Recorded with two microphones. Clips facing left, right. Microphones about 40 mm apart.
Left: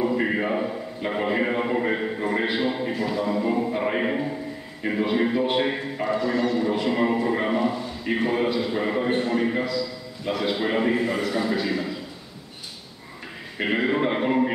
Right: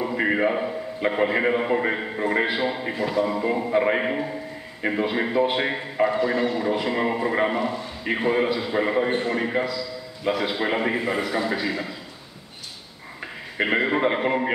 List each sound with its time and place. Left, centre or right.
0.2 s a sound: centre
2.0 s a man's voice: centre
6.1 s speech: right
6.6 s a man's voice: centre
7.5 s a man's voice: centre
8.0 s a man's voice: centre
13.6 s a man's voice: centre